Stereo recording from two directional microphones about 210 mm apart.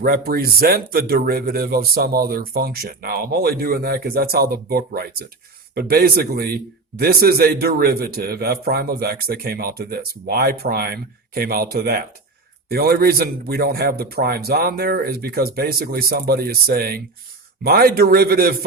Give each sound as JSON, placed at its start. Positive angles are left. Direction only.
{"t": 0.0, "sound": "speech", "side_deg": -45}